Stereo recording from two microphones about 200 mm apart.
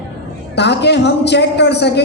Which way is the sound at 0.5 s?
60° left (ahead or behind).